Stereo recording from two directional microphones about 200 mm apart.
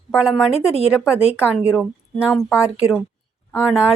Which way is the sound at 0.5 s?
30° left (ahead or behind).